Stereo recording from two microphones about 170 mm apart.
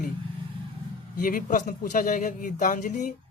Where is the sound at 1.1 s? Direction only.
55° left (ahead or behind).